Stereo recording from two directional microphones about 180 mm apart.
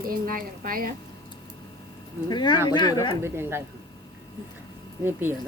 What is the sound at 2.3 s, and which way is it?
Speech, 25° left (ahead or behind).